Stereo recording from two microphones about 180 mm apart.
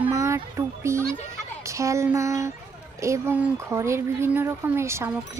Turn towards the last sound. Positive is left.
turn(degrees=-15)  # may be behind; listen again after turning